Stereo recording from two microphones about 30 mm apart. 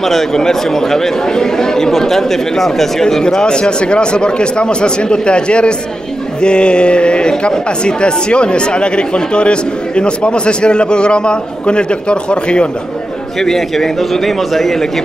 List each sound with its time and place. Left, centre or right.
0.0 s speech: centre
3.4 s speech: left
13.4 s speech: centre